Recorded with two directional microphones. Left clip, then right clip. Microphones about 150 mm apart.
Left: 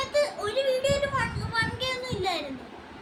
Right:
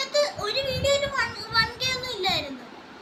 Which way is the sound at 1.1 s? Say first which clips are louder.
Right 3 dB; 20° left (ahead or behind).